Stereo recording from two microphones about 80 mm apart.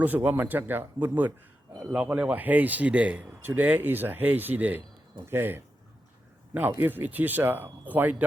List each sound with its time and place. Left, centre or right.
0.0 s speech: right